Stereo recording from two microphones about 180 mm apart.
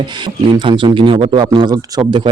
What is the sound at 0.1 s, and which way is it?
Speech, 25° right (ahead or behind).